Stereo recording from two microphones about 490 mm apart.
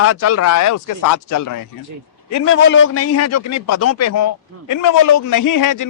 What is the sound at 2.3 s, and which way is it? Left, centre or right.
A man's voice, left.